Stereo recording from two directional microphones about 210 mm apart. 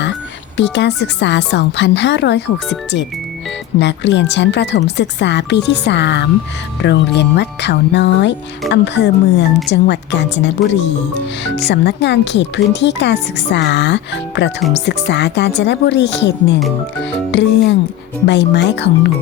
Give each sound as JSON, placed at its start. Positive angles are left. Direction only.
{"t": 0.0, "sound": "speech", "side_deg": 55}